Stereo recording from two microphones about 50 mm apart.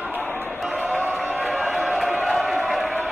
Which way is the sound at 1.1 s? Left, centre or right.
Right.